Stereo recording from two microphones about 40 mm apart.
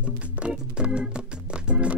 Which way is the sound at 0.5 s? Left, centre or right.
Right.